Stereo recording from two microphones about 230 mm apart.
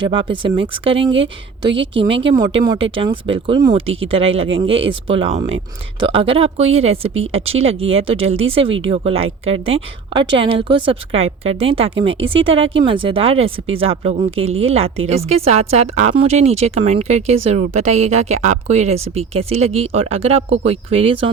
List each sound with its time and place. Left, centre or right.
0.1 s a woman's voice: right